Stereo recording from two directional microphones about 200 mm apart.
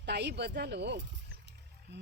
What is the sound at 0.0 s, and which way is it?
Speech, 55° right (ahead or behind).